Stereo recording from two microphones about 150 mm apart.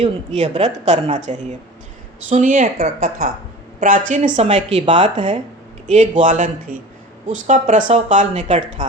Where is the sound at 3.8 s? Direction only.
55° right (ahead or behind).